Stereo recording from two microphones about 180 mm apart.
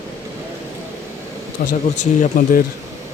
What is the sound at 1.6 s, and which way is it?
Speech, 50° left (ahead or behind).